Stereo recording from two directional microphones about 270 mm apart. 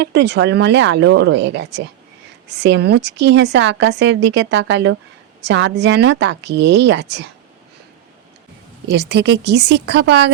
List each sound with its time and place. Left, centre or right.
0.0 s a woman's voice: right
8.9 s a woman's voice: right